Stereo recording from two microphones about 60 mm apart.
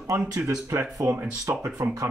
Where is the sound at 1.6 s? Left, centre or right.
Right.